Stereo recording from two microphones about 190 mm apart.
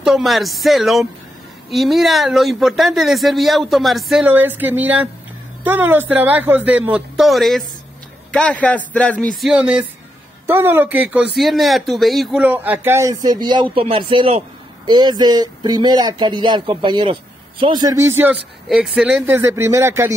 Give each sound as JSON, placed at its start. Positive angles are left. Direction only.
{"t": 0.0, "sound": "a man's voice", "side_deg": 0}
{"t": 9.4, "sound": "speech", "side_deg": -5}